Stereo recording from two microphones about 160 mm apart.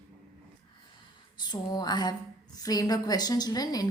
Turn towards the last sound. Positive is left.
turn(degrees=25)  # may be behind; listen again after turning